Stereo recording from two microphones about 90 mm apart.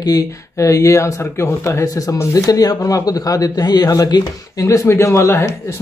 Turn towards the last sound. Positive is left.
turn(degrees=35)  # may be behind; listen again after turning